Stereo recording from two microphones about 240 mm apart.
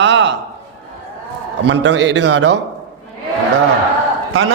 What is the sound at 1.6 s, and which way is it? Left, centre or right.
Speech, right.